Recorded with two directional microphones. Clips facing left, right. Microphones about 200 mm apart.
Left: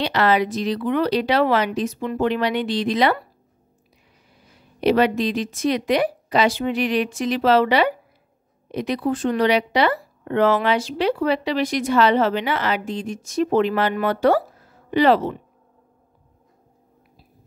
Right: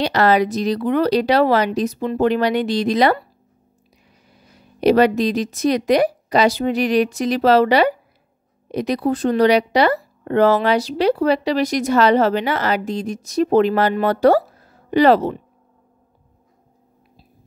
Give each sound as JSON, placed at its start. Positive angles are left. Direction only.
{"t": 0.0, "sound": "speech", "side_deg": -40}
{"t": 4.7, "sound": "speech", "side_deg": -40}